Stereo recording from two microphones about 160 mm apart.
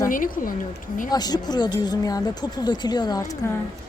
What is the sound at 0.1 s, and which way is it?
Speech, 60° left (ahead or behind).